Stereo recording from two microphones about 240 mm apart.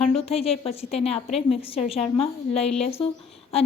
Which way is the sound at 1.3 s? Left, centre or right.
Centre.